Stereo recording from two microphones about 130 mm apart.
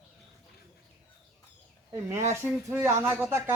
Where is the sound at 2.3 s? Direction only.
20° right (ahead or behind).